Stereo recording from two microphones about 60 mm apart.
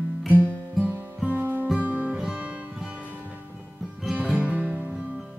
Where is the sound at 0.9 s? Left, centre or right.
Right.